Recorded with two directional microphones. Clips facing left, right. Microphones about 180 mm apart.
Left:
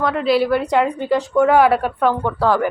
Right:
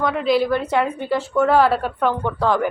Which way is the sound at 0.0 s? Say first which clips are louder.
Left 2 dB; centre (ahead or behind).